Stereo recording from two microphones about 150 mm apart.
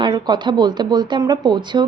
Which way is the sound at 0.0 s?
30° right (ahead or behind).